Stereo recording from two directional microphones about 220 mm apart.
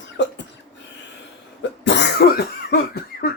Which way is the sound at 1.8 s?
50° left (ahead or behind).